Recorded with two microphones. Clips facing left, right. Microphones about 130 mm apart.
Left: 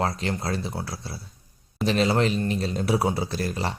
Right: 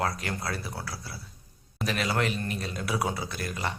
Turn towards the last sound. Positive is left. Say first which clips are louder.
# left 5 dB
turn(degrees=30)  # may be behind; listen again after turning